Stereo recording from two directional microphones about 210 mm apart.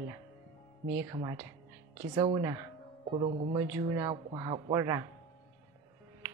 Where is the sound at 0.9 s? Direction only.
15° right (ahead or behind).